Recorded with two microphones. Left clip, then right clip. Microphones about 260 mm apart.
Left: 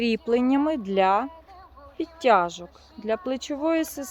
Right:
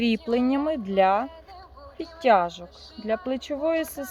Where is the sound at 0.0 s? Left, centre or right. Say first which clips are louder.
Left 1 dB; left.